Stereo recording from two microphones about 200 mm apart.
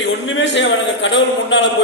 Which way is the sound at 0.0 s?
65° left (ahead or behind).